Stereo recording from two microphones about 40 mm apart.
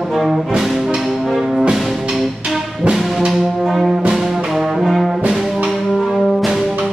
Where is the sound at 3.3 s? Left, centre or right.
Centre.